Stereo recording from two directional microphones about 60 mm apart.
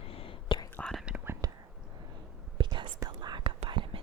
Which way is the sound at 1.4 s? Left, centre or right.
Right.